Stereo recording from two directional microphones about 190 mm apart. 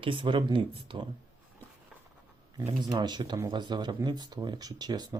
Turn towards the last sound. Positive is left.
turn(degrees=-20)  # may be behind; listen again after turning